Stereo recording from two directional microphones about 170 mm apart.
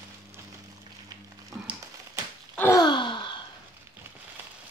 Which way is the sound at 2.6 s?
20° left (ahead or behind).